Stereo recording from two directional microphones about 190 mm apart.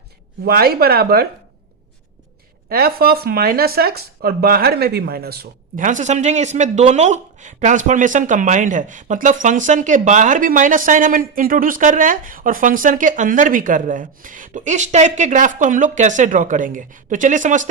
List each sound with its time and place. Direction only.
0.4 s speech: 55° right (ahead or behind)
2.6 s speech: 50° right (ahead or behind)